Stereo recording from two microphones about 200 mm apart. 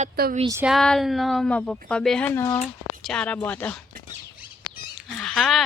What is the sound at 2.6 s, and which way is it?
Speech, 5° left (ahead or behind).